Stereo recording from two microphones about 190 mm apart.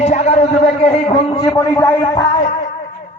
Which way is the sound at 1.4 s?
15° left (ahead or behind).